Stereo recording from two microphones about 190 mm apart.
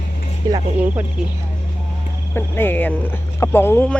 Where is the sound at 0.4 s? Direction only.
20° right (ahead or behind).